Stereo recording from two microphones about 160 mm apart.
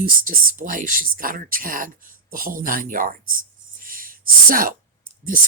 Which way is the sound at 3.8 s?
60° right (ahead or behind).